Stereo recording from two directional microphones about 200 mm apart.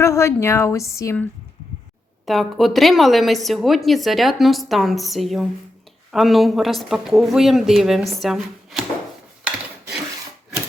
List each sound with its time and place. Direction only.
0.0 s a woman's voice: 15° left (ahead or behind)
2.2 s a woman's voice: centre (ahead or behind)